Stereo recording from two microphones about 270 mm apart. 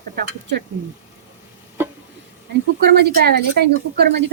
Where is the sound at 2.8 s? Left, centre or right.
Right.